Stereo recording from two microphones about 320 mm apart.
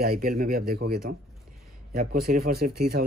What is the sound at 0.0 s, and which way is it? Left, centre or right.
Speech, right.